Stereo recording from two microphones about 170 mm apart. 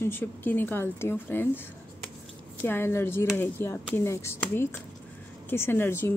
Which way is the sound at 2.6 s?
15° left (ahead or behind).